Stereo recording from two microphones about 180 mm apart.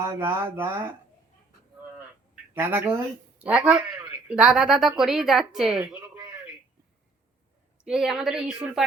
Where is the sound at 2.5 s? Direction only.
10° right (ahead or behind).